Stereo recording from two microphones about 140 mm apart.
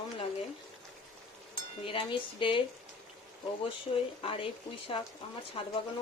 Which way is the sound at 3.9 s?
45° left (ahead or behind).